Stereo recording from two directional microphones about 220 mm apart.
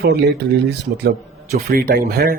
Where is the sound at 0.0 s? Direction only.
45° right (ahead or behind).